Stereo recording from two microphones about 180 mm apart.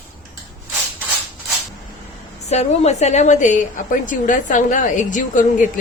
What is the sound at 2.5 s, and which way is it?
A woman's voice, 40° left (ahead or behind).